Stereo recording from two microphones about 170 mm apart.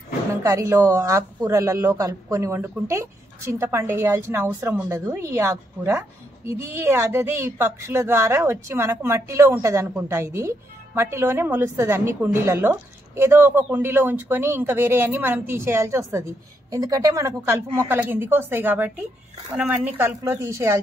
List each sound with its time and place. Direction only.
0.4 s a woman's voice: 20° right (ahead or behind)